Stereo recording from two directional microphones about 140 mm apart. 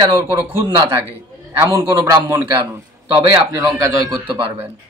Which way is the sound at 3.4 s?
25° right (ahead or behind).